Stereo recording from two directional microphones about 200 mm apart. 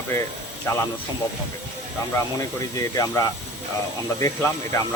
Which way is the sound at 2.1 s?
15° left (ahead or behind).